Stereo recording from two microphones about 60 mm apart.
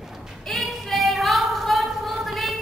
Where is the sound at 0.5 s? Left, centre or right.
Centre.